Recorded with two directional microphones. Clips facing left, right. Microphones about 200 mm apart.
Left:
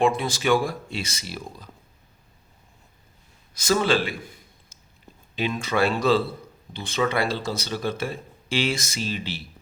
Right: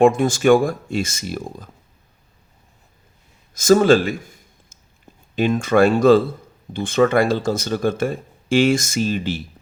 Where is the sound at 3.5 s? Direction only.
45° right (ahead or behind).